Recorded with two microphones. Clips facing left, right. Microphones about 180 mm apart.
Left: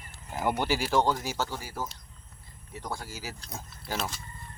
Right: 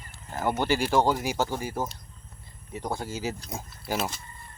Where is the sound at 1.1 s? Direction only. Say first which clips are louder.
Right 4 dB; 15° right (ahead or behind).